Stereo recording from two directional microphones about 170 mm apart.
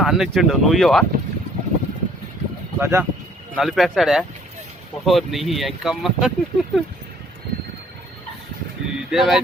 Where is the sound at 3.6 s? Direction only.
Centre (ahead or behind).